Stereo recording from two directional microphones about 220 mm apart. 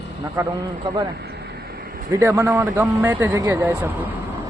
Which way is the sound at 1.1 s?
45° right (ahead or behind).